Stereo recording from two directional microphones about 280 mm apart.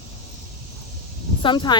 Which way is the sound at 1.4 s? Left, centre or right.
Centre.